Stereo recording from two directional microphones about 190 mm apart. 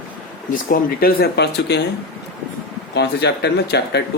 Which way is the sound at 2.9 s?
60° left (ahead or behind).